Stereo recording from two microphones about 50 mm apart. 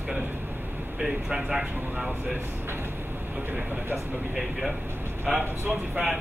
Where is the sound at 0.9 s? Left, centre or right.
Centre.